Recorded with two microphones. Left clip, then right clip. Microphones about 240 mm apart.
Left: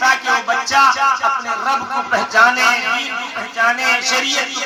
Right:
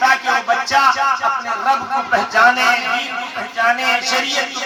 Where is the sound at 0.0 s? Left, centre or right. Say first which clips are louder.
Even; left.